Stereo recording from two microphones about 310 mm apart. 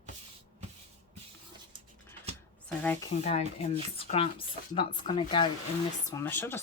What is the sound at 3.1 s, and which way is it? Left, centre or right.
A woman's voice, centre.